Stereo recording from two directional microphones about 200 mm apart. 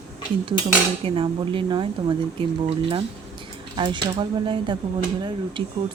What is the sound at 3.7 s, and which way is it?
Speech, 25° right (ahead or behind).